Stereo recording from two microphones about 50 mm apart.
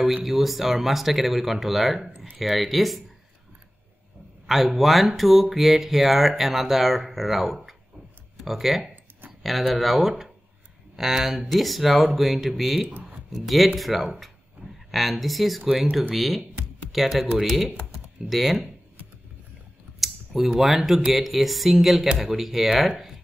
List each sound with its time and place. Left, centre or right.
0.0 s speech: centre
4.5 s speech: centre
12.8 s a sound: right
13.3 s speech: centre
20.0 s speech: centre